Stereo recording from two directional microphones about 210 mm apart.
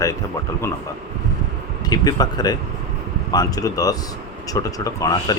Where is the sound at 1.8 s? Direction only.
20° left (ahead or behind).